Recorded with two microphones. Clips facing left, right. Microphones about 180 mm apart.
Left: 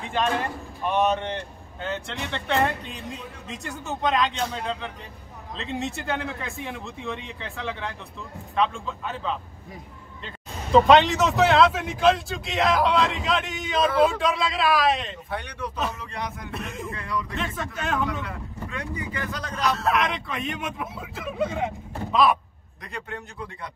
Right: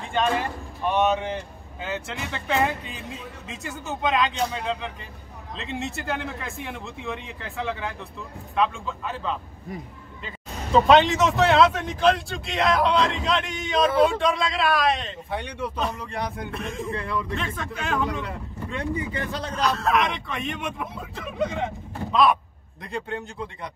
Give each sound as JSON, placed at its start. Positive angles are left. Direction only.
{"t": 0.0, "sound": "a man's voice", "side_deg": 0}
{"t": 15.3, "sound": "speech", "side_deg": -25}
{"t": 16.5, "sound": "a man's voice", "side_deg": 0}
{"t": 16.9, "sound": "speech", "side_deg": -30}
{"t": 17.4, "sound": "a man's voice", "side_deg": 0}
{"t": 18.2, "sound": "speech", "side_deg": -25}
{"t": 19.6, "sound": "a man's voice", "side_deg": 0}
{"t": 22.9, "sound": "speech", "side_deg": -30}